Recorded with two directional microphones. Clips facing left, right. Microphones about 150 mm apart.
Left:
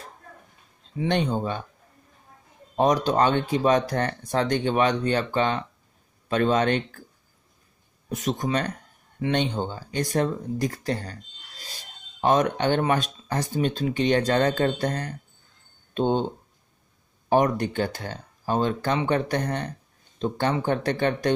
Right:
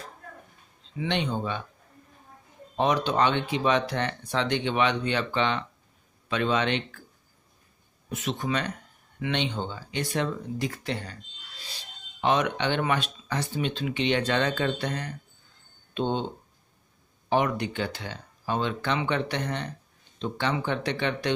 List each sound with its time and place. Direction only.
0.9 s speech: 45° left (ahead or behind)
2.7 s speech: 40° left (ahead or behind)
8.1 s speech: 40° left (ahead or behind)
17.3 s speech: 45° left (ahead or behind)